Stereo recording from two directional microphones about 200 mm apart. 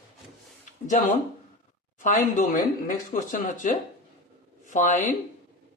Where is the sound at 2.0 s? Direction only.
40° left (ahead or behind).